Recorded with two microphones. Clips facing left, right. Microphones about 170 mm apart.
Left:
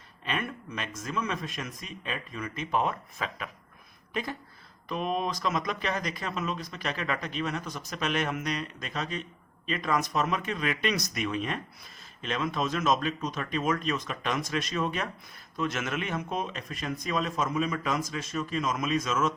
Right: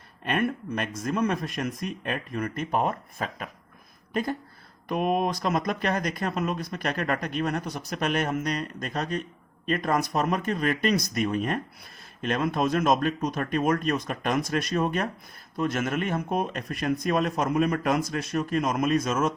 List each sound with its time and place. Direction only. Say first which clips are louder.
0.3 s speech: right 7 dB; 55° right (ahead or behind)